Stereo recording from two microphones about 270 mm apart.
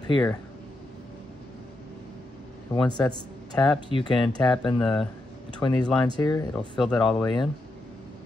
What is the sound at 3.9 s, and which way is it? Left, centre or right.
Speech, centre.